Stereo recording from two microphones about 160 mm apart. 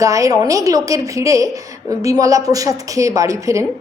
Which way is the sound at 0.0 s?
20° right (ahead or behind).